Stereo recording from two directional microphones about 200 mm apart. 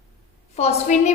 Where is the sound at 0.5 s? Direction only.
30° left (ahead or behind).